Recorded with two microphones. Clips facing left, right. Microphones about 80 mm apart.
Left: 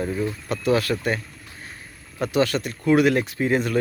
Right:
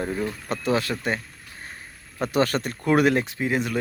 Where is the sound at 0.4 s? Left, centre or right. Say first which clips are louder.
Left 3 dB; right.